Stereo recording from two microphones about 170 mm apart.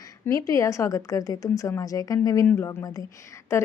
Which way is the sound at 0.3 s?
20° left (ahead or behind).